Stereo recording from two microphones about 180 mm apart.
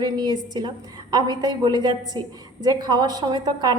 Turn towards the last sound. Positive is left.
turn(degrees=-20)  # may be behind; listen again after turning